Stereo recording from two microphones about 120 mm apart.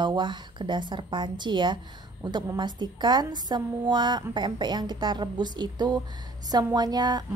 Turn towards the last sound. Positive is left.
turn(degrees=-35)  # may be behind; listen again after turning